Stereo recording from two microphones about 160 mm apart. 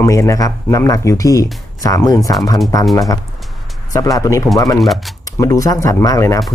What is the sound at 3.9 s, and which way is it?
Speech, 20° left (ahead or behind).